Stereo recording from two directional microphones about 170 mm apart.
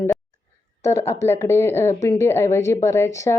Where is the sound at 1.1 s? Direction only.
15° left (ahead or behind).